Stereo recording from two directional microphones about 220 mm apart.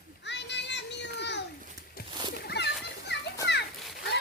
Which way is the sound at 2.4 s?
45° left (ahead or behind).